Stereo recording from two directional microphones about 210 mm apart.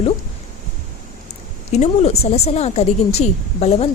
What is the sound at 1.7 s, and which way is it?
A woman's voice, 30° left (ahead or behind).